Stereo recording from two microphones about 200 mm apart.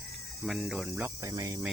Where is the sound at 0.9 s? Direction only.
15° right (ahead or behind).